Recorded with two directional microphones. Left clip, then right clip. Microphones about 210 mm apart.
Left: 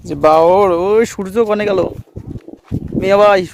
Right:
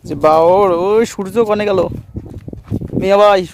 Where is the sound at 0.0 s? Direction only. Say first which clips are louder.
Left 1 dB; 10° right (ahead or behind).